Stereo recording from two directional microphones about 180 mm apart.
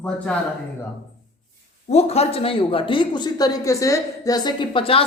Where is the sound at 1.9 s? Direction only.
35° left (ahead or behind).